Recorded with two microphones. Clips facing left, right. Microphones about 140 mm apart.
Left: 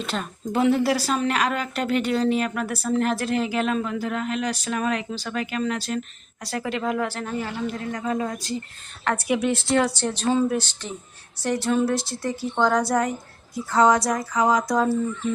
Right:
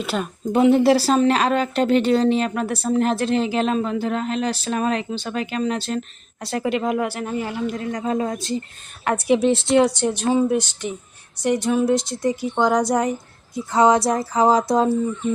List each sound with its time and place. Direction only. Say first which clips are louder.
0.0 s a woman's voice: right 4 dB; 5° right (ahead or behind)
0.5 s a woman's voice: right 6 dB; 20° right (ahead or behind)